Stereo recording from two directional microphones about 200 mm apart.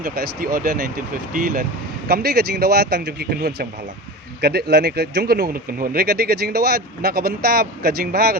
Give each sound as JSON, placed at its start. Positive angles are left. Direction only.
{"t": 0.0, "sound": "speech", "side_deg": -50}